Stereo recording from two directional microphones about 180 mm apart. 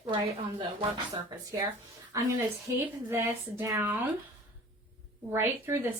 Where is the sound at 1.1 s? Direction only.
20° right (ahead or behind).